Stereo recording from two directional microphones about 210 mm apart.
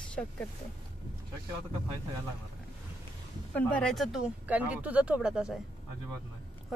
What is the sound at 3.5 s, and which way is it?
Speech, 5° left (ahead or behind).